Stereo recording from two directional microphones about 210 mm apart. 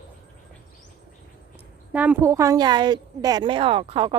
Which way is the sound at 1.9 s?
10° right (ahead or behind).